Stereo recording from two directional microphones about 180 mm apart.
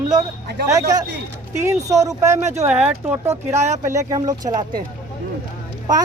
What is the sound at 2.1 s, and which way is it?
Speech, 15° right (ahead or behind).